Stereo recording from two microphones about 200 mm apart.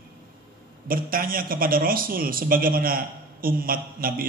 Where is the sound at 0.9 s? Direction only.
45° right (ahead or behind).